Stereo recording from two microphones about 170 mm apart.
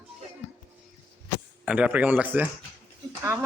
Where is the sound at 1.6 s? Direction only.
5° right (ahead or behind).